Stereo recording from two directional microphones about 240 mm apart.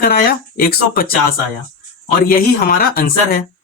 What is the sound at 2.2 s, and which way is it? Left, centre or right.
Speech, left.